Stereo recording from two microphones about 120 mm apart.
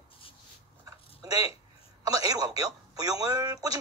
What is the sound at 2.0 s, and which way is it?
Speech, 30° right (ahead or behind).